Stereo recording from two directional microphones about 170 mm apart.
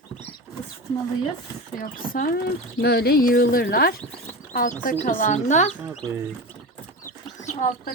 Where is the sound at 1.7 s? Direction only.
55° left (ahead or behind).